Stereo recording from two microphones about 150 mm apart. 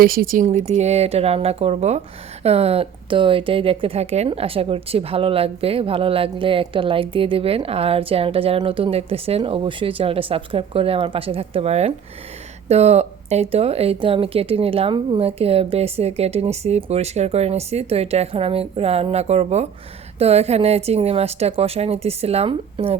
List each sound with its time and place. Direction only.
0.0 s speech: 75° right (ahead or behind)
0.4 s speech: 45° right (ahead or behind)